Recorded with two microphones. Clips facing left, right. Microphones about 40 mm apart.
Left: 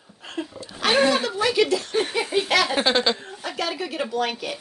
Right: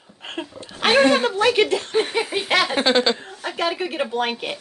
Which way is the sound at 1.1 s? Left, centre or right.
Right.